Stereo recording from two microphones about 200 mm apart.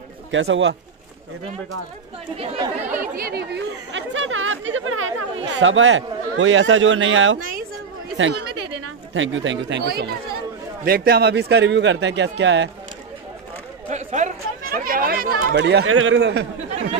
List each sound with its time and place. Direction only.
0.3 s speech: 70° right (ahead or behind)
2.3 s speech: 30° right (ahead or behind)
2.9 s speech: 45° right (ahead or behind); by 5.1 s 90° right
5.5 s speech: 70° right (ahead or behind)
7.3 s a woman's voice: 45° right (ahead or behind)
8.2 s a man's voice: 65° right (ahead or behind)
13.8 s speech: 35° right (ahead or behind); by 16.4 s 60° right (ahead or behind)